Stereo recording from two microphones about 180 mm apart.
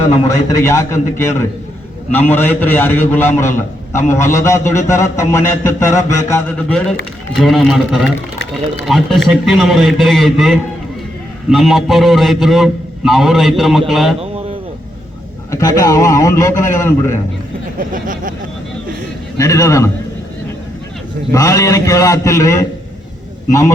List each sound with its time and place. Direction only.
0.6 s a man's voice: 15° left (ahead or behind); by 14.2 s centre (ahead or behind)
15.4 s a man's voice: 20° left (ahead or behind)
17.7 s vehicle: 50° right (ahead or behind)
19.4 s a man's voice: 15° left (ahead or behind)
21.3 s a man's voice: 15° left (ahead or behind)